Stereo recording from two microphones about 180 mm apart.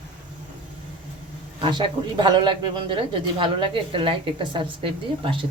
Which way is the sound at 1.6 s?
30° right (ahead or behind).